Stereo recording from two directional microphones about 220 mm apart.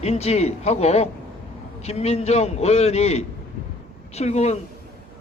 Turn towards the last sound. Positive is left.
turn(degrees=30)  # may be behind; listen again after turning